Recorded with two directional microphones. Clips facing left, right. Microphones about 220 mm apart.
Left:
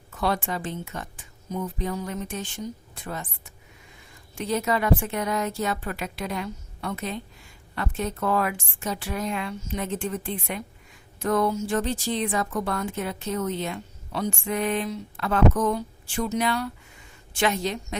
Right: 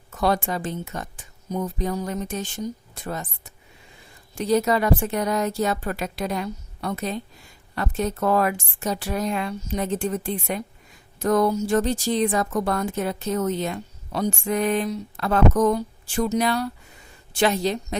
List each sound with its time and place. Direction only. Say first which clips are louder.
0.1 s a woman's voice: right 4 dB; 40° right (ahead or behind)